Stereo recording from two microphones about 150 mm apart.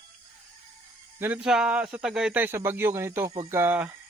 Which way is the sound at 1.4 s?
5° right (ahead or behind).